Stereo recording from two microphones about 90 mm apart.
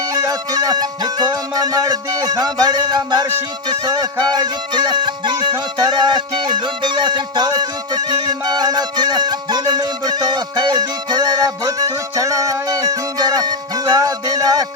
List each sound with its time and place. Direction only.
0.1 s music: 45° right (ahead or behind)